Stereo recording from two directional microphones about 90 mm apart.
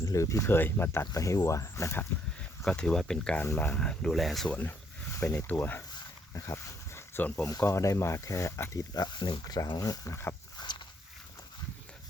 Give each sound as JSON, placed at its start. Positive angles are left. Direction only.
{"t": 0.0, "sound": "speech", "side_deg": 35}
{"t": 1.1, "sound": "speech", "side_deg": 35}
{"t": 2.6, "sound": "speech", "side_deg": 10}
{"t": 4.4, "sound": "speech", "side_deg": 15}
{"t": 5.1, "sound": "speech", "side_deg": 30}
{"t": 6.3, "sound": "dog", "side_deg": 35}
{"t": 7.2, "sound": "speech", "side_deg": 15}
{"t": 7.4, "sound": "speech", "side_deg": 35}
{"t": 8.9, "sound": "speech", "side_deg": 50}
{"t": 10.6, "sound": "walk", "side_deg": 55}